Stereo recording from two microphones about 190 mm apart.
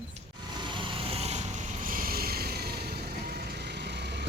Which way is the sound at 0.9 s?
30° right (ahead or behind).